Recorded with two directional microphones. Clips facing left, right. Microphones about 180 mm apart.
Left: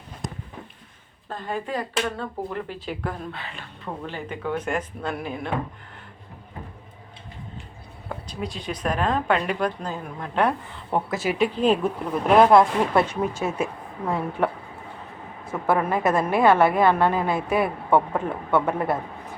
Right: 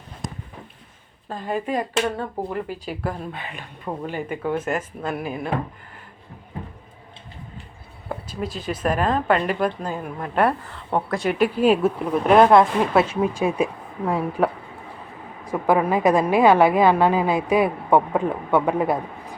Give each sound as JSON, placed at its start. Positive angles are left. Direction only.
{"t": 1.3, "sound": "a woman's voice", "side_deg": -15}
{"t": 8.3, "sound": "a woman's voice", "side_deg": 0}